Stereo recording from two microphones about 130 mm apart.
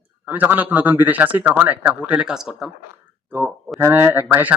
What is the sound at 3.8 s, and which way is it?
Speech, 15° right (ahead or behind).